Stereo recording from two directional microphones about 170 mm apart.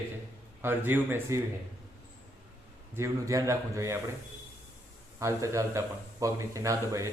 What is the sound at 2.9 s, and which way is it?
A man's voice, 15° right (ahead or behind).